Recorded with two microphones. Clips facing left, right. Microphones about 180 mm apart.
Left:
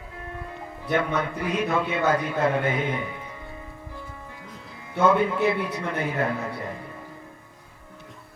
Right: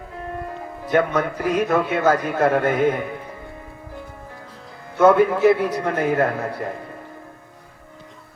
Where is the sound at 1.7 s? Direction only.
55° right (ahead or behind).